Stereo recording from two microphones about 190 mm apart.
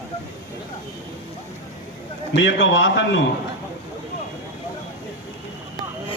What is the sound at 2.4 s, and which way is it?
Speech, 75° left (ahead or behind).